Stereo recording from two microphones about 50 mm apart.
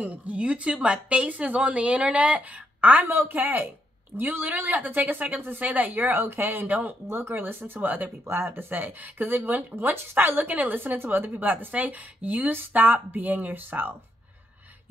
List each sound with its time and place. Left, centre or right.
0.0 s a woman's voice: right
3.1 s a woman's voice: right
7.1 s speech: right
8.3 s a woman's voice: right